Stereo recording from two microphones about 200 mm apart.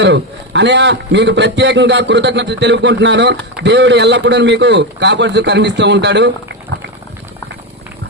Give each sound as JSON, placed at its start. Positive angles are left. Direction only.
{"t": 0.0, "sound": "a man's voice", "side_deg": -60}